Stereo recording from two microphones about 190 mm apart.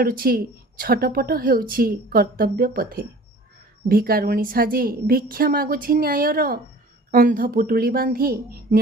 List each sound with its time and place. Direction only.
0.0 s a woman's voice: 50° right (ahead or behind)